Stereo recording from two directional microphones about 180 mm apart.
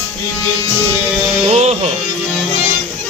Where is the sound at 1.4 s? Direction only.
35° right (ahead or behind).